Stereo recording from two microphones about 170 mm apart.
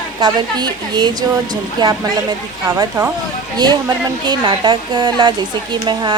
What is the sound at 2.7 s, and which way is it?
Speech, 15° right (ahead or behind).